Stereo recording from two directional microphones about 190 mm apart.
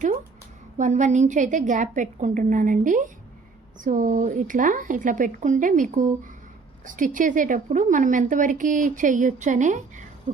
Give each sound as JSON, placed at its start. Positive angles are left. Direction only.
{"t": 0.8, "sound": "a woman's voice", "side_deg": -40}